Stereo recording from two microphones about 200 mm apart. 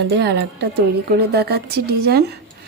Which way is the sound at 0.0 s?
55° right (ahead or behind).